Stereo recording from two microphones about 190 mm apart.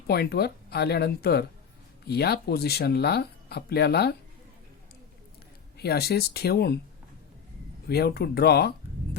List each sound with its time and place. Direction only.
0.1 s speech: 55° left (ahead or behind)
5.7 s speech: 55° left (ahead or behind)
7.9 s speech: 55° left (ahead or behind)